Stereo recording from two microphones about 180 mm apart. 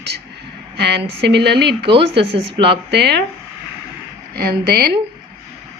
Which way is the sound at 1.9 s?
30° right (ahead or behind).